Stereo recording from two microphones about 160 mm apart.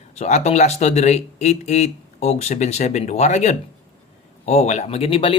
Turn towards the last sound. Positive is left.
turn(degrees=35)  # may be behind; listen again after turning